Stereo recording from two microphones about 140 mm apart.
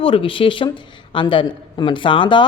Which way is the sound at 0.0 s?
40° left (ahead or behind).